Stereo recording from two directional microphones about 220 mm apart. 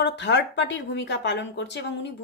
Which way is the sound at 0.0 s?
50° left (ahead or behind).